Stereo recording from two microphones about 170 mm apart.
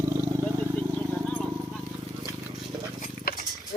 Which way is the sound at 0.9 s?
10° left (ahead or behind).